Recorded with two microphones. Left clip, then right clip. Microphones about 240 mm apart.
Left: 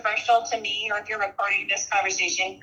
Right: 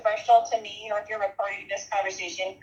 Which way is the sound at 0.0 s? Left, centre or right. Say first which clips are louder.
Right 1 dB; left.